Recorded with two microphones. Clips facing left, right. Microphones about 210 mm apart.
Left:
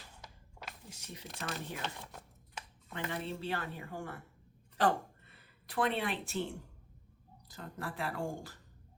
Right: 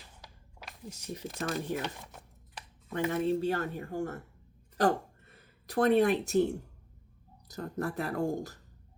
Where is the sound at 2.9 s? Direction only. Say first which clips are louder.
Right 10 dB; 45° right (ahead or behind).